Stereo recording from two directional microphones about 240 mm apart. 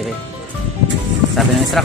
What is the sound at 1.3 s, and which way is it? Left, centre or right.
Speech, centre.